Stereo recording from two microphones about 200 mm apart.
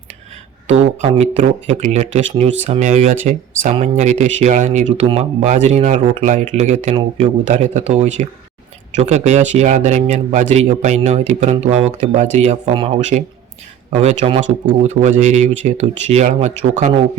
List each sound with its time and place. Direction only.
0.7 s speech: 30° right (ahead or behind)